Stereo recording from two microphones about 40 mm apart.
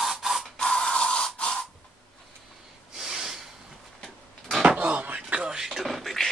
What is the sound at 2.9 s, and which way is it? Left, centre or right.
Snort, centre.